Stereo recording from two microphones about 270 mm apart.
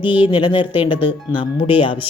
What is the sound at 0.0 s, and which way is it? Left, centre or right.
Speech, centre.